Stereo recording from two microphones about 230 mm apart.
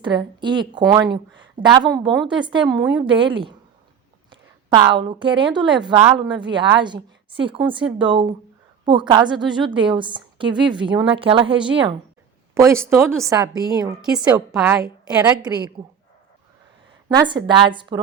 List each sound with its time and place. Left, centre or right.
0.0 s a woman's voice: centre
14.0 s a woman's voice: centre
15.8 s a woman's voice: right
17.1 s a woman's voice: centre